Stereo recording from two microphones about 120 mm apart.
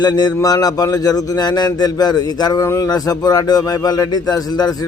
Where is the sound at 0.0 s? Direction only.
35° left (ahead or behind).